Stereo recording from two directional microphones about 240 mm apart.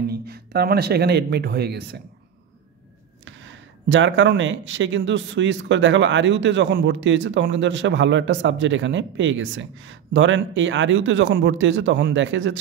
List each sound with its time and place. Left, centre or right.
0.0 s speech: right
3.3 s speech: right